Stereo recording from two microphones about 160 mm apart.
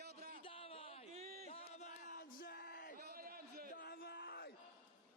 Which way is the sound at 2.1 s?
80° left.